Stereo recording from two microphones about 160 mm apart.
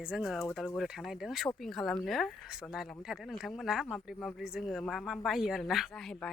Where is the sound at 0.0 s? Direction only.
5° right (ahead or behind).